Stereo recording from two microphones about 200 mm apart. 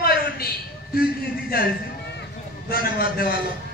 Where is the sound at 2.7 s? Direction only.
50° left (ahead or behind).